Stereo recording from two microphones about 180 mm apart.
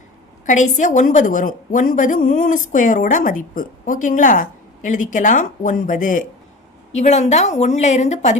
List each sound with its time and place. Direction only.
0.4 s a woman's voice: 45° left (ahead or behind)